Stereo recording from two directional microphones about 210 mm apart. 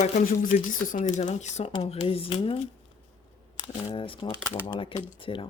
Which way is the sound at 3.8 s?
25° left (ahead or behind).